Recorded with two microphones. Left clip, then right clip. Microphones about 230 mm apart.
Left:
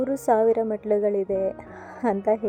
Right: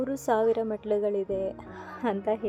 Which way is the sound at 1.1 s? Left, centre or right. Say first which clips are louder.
Left 5 dB; centre.